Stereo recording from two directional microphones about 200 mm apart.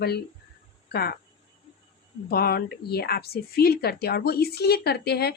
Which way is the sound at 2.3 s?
50° left (ahead or behind).